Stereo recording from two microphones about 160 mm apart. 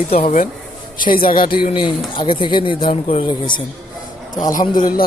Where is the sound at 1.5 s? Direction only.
30° left (ahead or behind).